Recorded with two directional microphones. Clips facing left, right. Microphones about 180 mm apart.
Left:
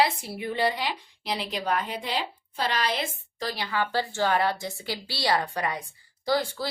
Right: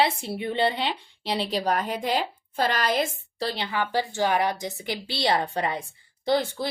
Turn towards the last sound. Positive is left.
turn(degrees=-20)  # may be behind; listen again after turning